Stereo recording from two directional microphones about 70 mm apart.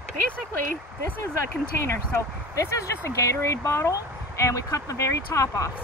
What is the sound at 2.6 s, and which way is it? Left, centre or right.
Speech, left.